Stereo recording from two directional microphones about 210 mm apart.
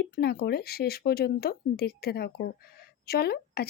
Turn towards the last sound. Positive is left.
turn(degrees=50)  # may be behind; listen again after turning